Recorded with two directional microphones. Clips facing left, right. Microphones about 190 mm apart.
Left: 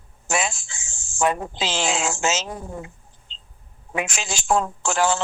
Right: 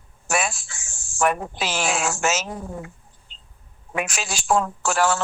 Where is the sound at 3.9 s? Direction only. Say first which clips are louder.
Even; 20° left (ahead or behind).